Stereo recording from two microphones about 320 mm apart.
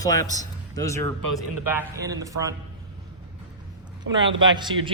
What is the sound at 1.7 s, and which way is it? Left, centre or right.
Speech, centre.